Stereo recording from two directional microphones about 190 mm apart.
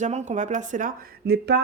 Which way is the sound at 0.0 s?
40° right (ahead or behind).